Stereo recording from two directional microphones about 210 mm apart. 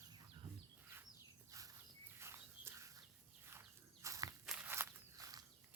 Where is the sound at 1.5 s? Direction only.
15° right (ahead or behind).